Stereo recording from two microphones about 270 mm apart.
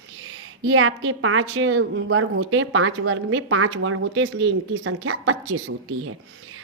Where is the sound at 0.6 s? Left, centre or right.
Right.